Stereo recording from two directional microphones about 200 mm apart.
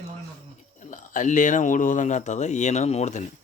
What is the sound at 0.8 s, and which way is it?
Speech, 40° left (ahead or behind).